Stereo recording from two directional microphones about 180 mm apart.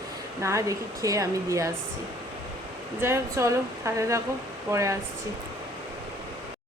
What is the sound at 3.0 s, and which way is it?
Speech, 15° right (ahead or behind).